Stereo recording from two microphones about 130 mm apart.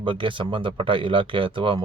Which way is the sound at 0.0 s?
40° right (ahead or behind).